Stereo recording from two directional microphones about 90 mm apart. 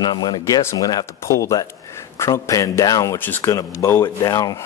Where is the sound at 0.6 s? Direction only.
30° left (ahead or behind).